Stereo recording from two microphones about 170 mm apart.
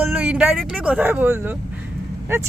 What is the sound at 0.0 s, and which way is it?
Speech, 5° right (ahead or behind).